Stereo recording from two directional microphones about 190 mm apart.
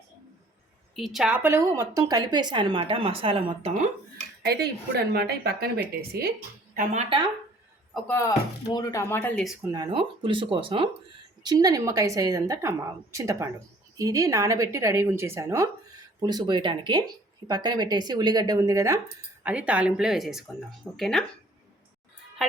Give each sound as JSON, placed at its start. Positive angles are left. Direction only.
{"t": 0.9, "sound": "speech", "side_deg": 0}
{"t": 4.9, "sound": "speech", "side_deg": -55}
{"t": 7.9, "sound": "speech", "side_deg": 10}
{"t": 9.7, "sound": "a woman's voice", "side_deg": -25}